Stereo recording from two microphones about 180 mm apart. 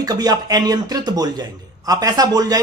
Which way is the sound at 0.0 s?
20° right (ahead or behind).